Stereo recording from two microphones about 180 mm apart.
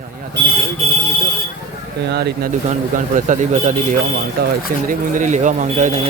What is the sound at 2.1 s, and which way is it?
Speech, 65° right (ahead or behind).